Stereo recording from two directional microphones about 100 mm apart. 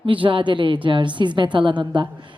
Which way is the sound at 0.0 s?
55° right (ahead or behind).